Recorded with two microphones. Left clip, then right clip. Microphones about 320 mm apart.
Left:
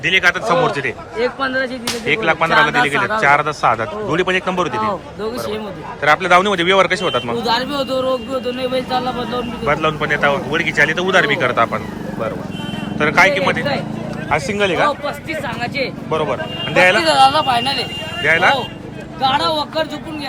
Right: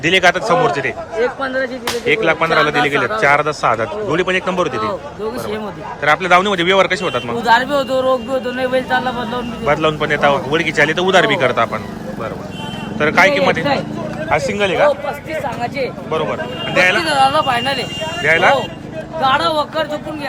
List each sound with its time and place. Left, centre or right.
0.0 s a man's voice: centre
1.4 s speech: left
2.0 s speech: centre
6.0 s a man's voice: centre
13.0 s a man's voice: centre